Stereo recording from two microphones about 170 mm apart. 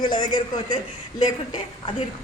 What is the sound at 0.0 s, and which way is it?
Speech, 25° left (ahead or behind).